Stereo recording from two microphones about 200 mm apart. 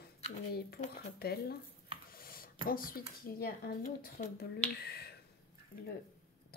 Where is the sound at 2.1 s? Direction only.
45° left (ahead or behind).